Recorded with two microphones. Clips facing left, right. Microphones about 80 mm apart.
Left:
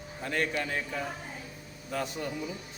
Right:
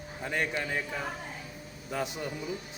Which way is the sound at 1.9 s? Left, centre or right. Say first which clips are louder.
Even; centre.